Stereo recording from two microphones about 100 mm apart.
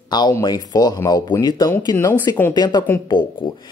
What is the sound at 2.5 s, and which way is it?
Speech, 45° left (ahead or behind).